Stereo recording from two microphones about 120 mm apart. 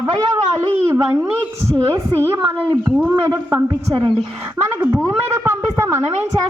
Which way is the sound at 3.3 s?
30° right (ahead or behind).